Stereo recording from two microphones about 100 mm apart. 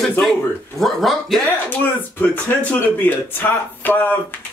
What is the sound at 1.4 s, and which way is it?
Speech, 20° left (ahead or behind).